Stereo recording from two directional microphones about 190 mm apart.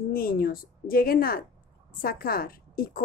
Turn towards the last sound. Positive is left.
turn(degrees=50)  # may be behind; listen again after turning